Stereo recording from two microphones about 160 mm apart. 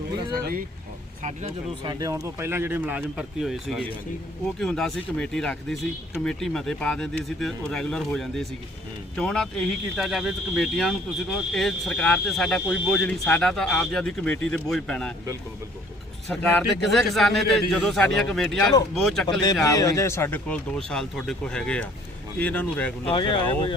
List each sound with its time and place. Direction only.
1.8 s speech: 25° right (ahead or behind); by 15.1 s 5° left (ahead or behind)
16.3 s speech: 5° left (ahead or behind)
19.6 s speech: 20° left (ahead or behind)
23.0 s speech: 30° left (ahead or behind)